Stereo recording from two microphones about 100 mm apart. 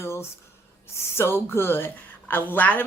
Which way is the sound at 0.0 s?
25° left (ahead or behind).